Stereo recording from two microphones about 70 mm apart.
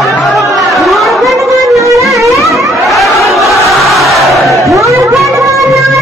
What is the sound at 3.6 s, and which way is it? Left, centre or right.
Battle cry, centre.